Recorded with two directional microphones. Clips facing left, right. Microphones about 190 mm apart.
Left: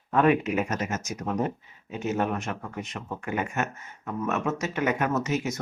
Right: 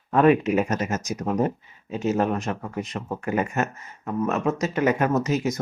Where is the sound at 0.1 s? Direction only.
35° right (ahead or behind).